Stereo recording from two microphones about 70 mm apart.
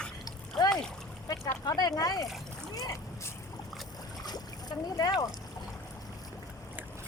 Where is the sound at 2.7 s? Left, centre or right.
Left.